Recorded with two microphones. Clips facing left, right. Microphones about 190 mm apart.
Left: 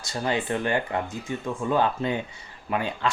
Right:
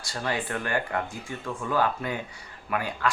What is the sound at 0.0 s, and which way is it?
Speech, 20° left (ahead or behind).